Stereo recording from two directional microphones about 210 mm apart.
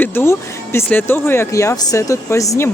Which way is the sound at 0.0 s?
10° left (ahead or behind).